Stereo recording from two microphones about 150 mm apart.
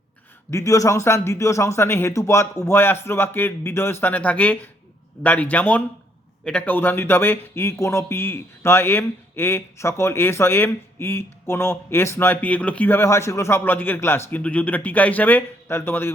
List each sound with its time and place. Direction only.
0.5 s speech: 20° left (ahead or behind)